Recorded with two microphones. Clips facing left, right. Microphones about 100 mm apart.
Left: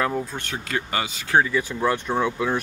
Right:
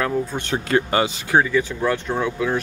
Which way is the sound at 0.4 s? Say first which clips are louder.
Right 8 dB; 30° right (ahead or behind).